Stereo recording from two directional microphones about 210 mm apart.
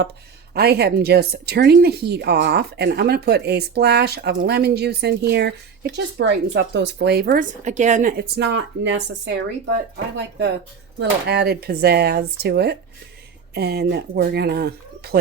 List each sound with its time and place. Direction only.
0.5 s a woman's voice: 50° right (ahead or behind)
8.4 s a woman's voice: 60° right (ahead or behind)